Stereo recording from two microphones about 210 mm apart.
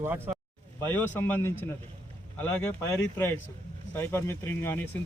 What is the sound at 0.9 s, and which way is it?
Speech, 10° left (ahead or behind).